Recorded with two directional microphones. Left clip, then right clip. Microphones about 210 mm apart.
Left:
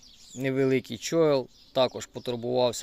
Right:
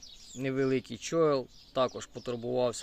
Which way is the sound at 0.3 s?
20° left (ahead or behind).